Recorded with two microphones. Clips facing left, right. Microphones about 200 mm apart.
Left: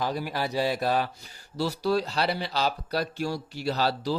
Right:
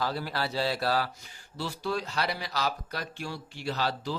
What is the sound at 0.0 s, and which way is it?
Speech, 15° left (ahead or behind).